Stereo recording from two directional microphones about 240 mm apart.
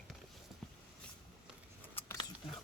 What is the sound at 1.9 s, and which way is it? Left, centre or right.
Scissors, centre.